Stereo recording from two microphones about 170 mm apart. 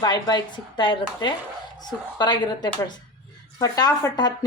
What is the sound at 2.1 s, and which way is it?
Speech, 25° left (ahead or behind).